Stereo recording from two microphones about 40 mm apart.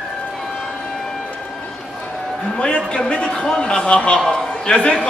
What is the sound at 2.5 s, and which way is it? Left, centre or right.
A man's voice, left.